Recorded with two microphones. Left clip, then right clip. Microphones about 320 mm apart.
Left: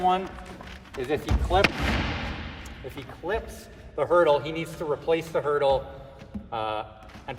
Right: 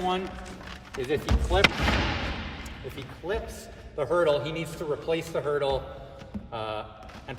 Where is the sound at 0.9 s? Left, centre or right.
Centre.